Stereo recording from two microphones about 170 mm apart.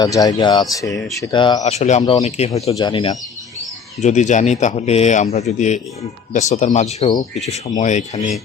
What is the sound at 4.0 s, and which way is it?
Speech, 45° left (ahead or behind).